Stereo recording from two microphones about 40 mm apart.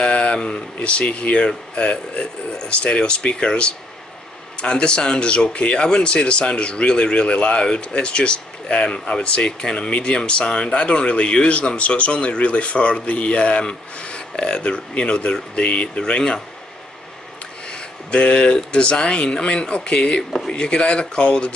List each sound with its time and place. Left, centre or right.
0.0 s speech: left
17.6 s speech: left